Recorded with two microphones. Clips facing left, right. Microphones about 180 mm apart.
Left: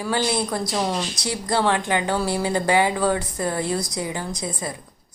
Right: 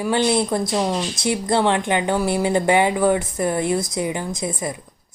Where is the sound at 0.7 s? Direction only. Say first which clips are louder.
Right 2 dB; 10° right (ahead or behind).